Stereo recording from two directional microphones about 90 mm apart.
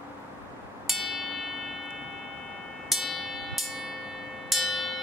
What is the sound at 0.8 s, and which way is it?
Music, centre (ahead or behind).